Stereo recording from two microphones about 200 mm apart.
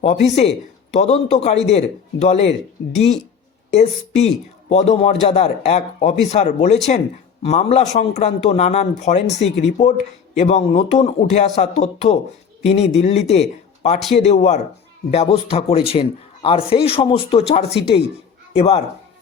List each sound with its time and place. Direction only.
0.0 s a man's voice: 35° left (ahead or behind)